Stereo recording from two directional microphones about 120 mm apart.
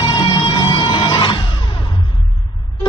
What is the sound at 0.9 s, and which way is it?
Music, 40° left (ahead or behind).